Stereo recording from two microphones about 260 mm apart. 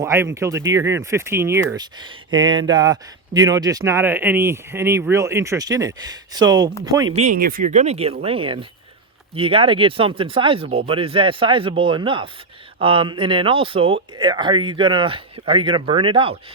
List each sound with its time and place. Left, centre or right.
0.0 s speech: centre
7.2 s speech: right